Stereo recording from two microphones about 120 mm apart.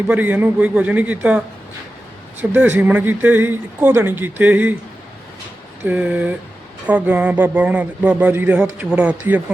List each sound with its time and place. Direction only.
0.1 s speech: 15° right (ahead or behind)
2.4 s speech: 15° right (ahead or behind)
5.8 s speech: 10° right (ahead or behind)